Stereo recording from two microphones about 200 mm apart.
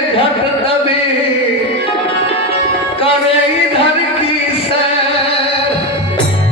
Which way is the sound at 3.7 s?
25° left (ahead or behind).